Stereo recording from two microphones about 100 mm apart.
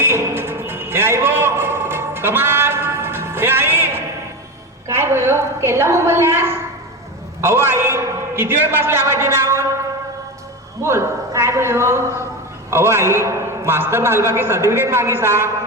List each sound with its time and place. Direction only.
0.0 s music: 25° right (ahead or behind)
4.9 s a man's voice: 25° right (ahead or behind)
10.8 s a man's voice: 25° right (ahead or behind)